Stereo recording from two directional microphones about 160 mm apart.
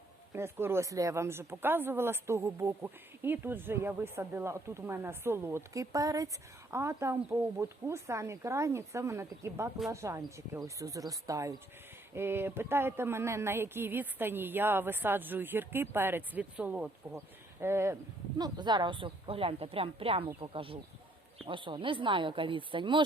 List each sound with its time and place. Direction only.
0.3 s speech: 15° right (ahead or behind)
18.3 s a woman's voice: 25° right (ahead or behind)